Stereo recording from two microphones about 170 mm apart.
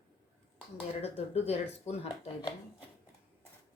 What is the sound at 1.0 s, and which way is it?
Speech, 35° left (ahead or behind).